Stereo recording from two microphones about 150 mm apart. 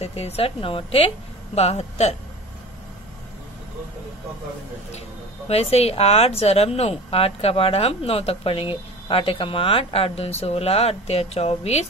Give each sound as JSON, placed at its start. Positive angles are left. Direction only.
{"t": 0.0, "sound": "a woman's voice", "side_deg": 45}
{"t": 5.5, "sound": "a woman's voice", "side_deg": 40}